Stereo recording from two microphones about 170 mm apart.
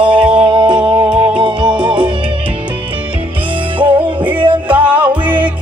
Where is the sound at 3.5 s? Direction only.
30° right (ahead or behind).